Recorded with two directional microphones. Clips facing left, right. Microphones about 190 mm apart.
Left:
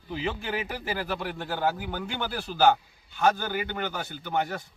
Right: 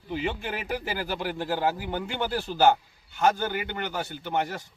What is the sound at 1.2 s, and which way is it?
A man's voice, 5° right (ahead or behind).